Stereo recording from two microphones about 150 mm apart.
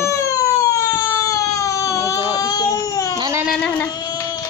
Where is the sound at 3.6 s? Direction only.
10° left (ahead or behind).